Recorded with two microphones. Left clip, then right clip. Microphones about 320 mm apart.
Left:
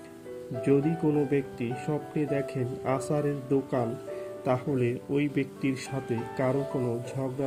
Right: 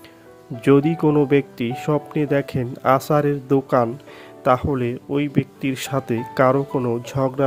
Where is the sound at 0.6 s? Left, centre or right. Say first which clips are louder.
Right 9 dB; right.